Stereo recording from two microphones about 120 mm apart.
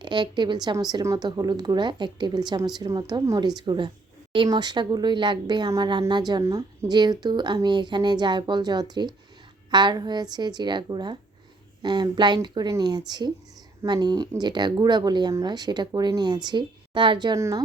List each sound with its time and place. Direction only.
0.0 s a woman's voice: 40° right (ahead or behind)
17.3 s a woman's voice: 25° right (ahead or behind)